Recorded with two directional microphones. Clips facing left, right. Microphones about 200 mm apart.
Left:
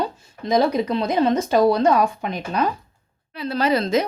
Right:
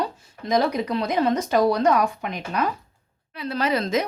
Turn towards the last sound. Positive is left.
turn(degrees=30)  # may be behind; listen again after turning